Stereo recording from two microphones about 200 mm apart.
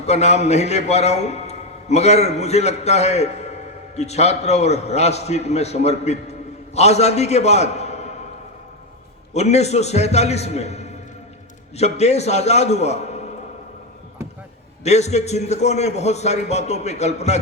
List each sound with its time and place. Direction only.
0.0 s a man's voice: 35° left (ahead or behind)
9.3 s a man's voice: 35° left (ahead or behind)
14.8 s a man's voice: 35° left (ahead or behind)